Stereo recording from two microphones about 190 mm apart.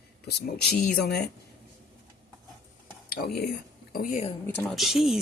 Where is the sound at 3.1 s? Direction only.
55° left (ahead or behind).